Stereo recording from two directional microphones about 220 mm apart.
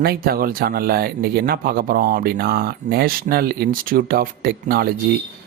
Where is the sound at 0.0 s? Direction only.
45° right (ahead or behind).